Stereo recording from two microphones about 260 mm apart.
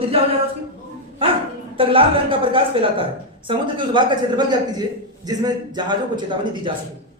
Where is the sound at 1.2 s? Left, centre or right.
Right.